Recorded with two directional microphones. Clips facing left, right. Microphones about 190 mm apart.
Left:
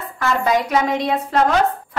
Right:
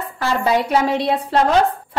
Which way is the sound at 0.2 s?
30° right (ahead or behind).